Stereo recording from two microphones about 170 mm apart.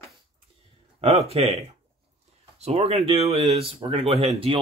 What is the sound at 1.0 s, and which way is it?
Speech, 35° right (ahead or behind).